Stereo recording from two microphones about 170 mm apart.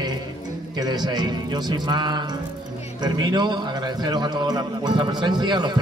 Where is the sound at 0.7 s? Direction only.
25° right (ahead or behind).